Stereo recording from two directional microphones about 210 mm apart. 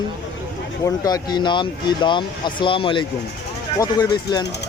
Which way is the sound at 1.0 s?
20° left (ahead or behind).